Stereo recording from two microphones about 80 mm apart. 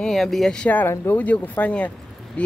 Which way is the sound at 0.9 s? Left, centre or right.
Left.